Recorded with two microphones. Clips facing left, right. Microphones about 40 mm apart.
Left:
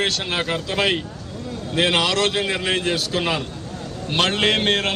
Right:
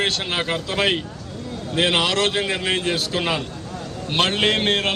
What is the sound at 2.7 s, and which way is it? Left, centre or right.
Speech, right.